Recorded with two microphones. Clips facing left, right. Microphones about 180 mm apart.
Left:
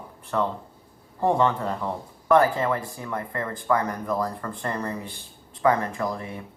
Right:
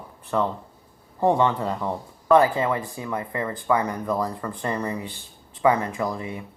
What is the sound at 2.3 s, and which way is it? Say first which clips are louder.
Speech: right 2 dB; 15° right (ahead or behind).